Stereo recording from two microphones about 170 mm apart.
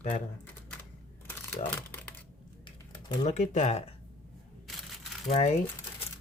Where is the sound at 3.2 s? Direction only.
45° left (ahead or behind).